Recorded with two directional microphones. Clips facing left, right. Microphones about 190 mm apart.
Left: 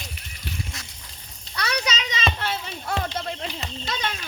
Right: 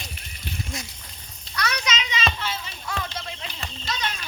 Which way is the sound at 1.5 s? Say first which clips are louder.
Left 1 dB; 30° left (ahead or behind).